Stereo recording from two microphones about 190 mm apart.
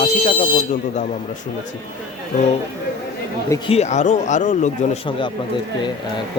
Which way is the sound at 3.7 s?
35° left (ahead or behind).